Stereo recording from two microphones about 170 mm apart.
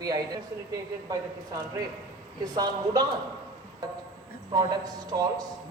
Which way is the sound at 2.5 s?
20° right (ahead or behind).